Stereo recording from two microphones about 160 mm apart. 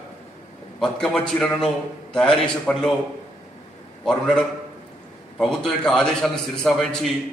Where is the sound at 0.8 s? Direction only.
5° left (ahead or behind).